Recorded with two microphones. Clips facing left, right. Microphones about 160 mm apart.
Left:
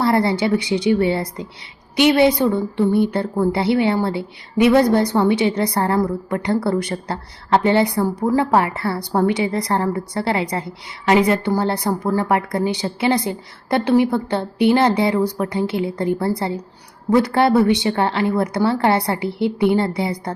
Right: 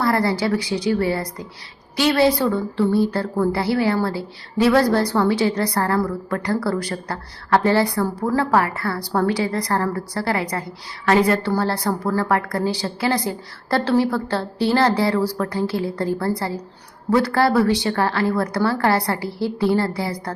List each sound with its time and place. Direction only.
0.0 s a woman's voice: 25° left (ahead or behind)